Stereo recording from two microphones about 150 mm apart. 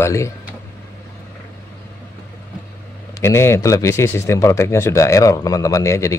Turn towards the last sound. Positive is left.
turn(degrees=20)  # may be behind; listen again after turning